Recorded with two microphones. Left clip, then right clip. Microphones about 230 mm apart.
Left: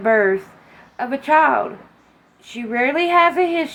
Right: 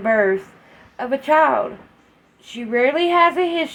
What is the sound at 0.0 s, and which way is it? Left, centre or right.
Speech, right.